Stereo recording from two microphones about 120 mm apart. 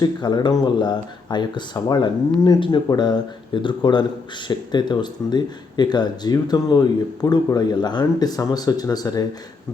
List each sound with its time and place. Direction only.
0.0 s speech: 35° left (ahead or behind)